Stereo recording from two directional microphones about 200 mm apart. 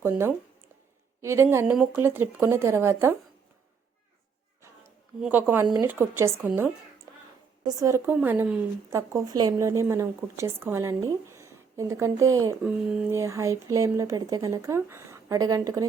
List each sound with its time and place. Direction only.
0.0 s a woman's voice: 10° right (ahead or behind)
5.2 s a woman's voice: 10° right (ahead or behind)
12.6 s a woman's voice: 5° right (ahead or behind)